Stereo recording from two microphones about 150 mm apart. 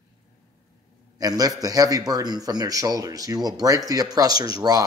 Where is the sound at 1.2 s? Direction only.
25° right (ahead or behind).